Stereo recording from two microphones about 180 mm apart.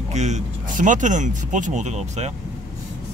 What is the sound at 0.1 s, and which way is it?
Speech, 40° right (ahead or behind).